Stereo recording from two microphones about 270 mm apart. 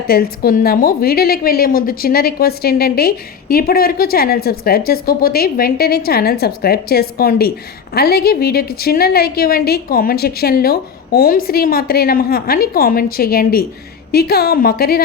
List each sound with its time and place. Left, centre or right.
0.1 s a woman's voice: left